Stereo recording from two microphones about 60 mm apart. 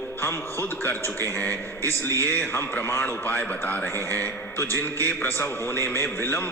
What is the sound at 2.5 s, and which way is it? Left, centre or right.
Speech, left.